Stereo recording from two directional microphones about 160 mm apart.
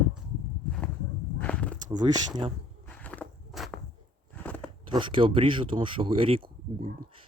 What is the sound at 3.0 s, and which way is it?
Biting, 10° left (ahead or behind).